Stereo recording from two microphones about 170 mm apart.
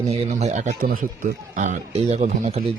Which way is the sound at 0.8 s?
55° right (ahead or behind).